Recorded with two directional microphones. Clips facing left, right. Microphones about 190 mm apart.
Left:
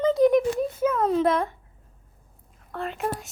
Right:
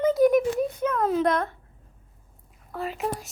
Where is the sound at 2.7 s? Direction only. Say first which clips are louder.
Even; 5° right (ahead or behind).